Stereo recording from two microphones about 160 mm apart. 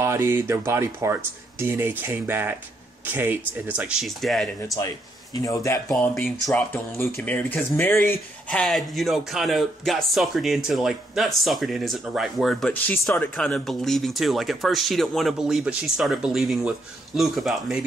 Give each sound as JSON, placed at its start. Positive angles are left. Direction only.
{"t": 0.0, "sound": "speech", "side_deg": -15}
{"t": 4.7, "sound": "speech", "side_deg": 20}
{"t": 6.1, "sound": "speech", "side_deg": 5}
{"t": 13.4, "sound": "speech", "side_deg": 5}